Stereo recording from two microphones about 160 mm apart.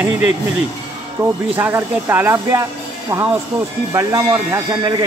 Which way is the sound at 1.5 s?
15° right (ahead or behind).